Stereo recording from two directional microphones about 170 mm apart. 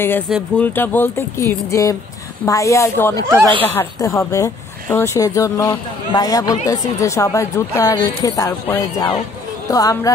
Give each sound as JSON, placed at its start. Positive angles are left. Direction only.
{"t": 0.6, "sound": "speech", "side_deg": 10}
{"t": 3.3, "sound": "speech", "side_deg": -15}
{"t": 3.6, "sound": "speech", "side_deg": 15}